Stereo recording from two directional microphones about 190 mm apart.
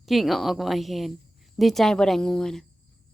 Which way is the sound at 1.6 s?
Centre (ahead or behind).